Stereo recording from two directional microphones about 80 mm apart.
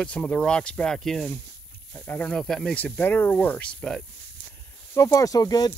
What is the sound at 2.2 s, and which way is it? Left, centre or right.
Speech, centre.